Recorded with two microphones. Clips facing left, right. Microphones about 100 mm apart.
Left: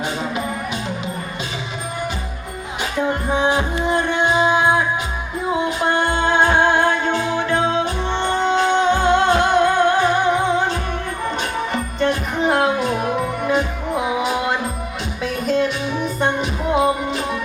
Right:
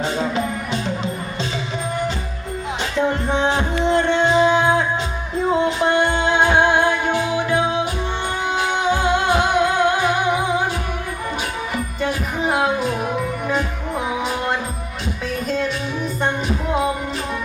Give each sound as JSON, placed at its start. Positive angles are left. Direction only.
{"t": 3.2, "sound": "music", "side_deg": 15}
{"t": 5.6, "sound": "music", "side_deg": -20}
{"t": 11.7, "sound": "music", "side_deg": -5}